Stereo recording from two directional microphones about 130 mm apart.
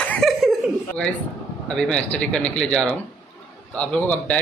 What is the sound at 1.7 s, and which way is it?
Speech, 5° left (ahead or behind).